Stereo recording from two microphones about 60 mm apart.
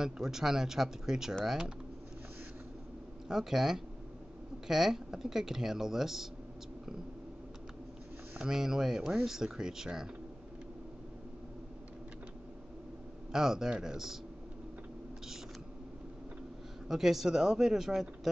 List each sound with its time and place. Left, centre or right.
0.0 s speech: centre
3.3 s speech: centre
8.4 s speech: centre
13.3 s speech: centre
16.8 s speech: centre